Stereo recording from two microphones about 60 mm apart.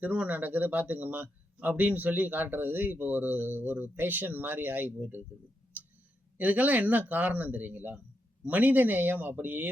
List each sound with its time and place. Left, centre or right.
0.0 s speech: right
6.3 s speech: right